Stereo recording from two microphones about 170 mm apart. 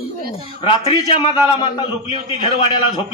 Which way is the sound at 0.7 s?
25° left (ahead or behind).